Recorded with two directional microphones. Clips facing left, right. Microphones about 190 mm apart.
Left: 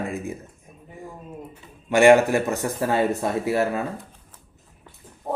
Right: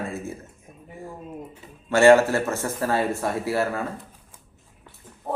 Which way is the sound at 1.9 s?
15° left (ahead or behind).